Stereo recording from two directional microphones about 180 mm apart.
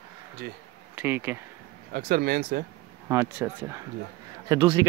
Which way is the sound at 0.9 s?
10° right (ahead or behind).